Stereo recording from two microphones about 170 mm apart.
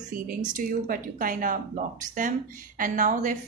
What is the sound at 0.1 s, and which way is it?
A woman's voice, 55° right (ahead or behind).